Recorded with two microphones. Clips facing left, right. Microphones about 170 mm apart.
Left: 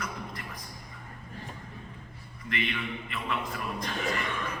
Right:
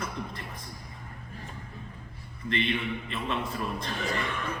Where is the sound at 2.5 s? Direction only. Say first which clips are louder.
Right 4 dB; 30° right (ahead or behind).